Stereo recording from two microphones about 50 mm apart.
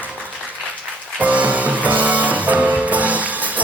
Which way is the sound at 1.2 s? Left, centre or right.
Right.